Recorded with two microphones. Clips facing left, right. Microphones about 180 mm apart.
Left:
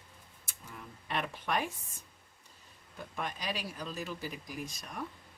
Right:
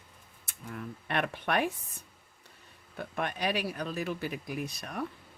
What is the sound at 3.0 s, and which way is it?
Speech, 60° right (ahead or behind).